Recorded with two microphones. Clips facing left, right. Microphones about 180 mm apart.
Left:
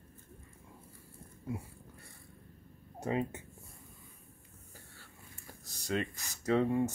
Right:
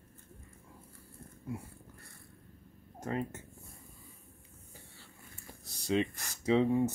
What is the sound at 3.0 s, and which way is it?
Speech, 15° left (ahead or behind).